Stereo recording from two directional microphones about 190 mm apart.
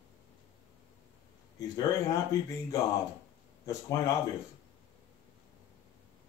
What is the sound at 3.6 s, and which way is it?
Speech, 20° left (ahead or behind).